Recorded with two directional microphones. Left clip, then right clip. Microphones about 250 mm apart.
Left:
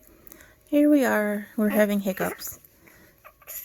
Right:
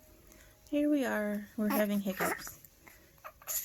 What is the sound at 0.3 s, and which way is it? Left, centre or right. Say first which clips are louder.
Speech: left 10 dB; left.